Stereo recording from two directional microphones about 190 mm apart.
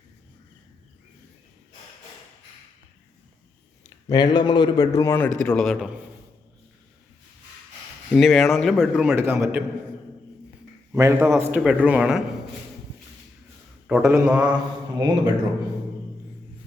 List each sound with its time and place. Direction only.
4.1 s a man's voice: 20° left (ahead or behind); by 5.9 s centre (ahead or behind)
8.1 s a man's voice: centre (ahead or behind)
10.9 s a man's voice: 15° right (ahead or behind)
13.8 s a man's voice: 10° right (ahead or behind)
14.9 s speech: 20° right (ahead or behind)